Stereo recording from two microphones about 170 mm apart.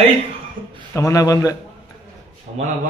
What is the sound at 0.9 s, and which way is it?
Speech, 20° left (ahead or behind).